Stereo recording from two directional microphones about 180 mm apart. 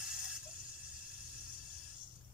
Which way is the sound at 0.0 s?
5° right (ahead or behind).